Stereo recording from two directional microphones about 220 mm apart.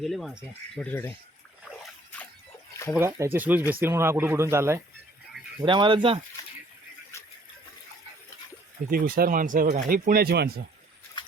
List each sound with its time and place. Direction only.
0.0 s speech: centre (ahead or behind)
3.0 s speech: 10° right (ahead or behind)
5.6 s speech: 20° right (ahead or behind)
8.9 s speech: 40° right (ahead or behind)